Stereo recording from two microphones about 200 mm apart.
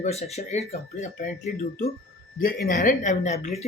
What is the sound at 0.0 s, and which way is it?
Speech, 35° left (ahead or behind).